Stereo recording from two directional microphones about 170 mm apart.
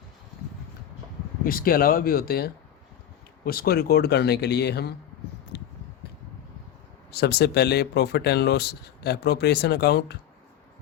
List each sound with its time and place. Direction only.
1.5 s speech: 60° left (ahead or behind)
5.5 s a sound: 90° left
7.1 s speech: 70° left (ahead or behind)